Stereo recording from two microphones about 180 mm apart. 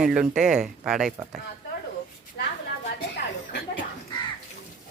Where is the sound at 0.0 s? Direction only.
5° right (ahead or behind).